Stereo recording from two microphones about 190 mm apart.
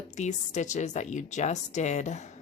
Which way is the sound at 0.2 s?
40° left (ahead or behind).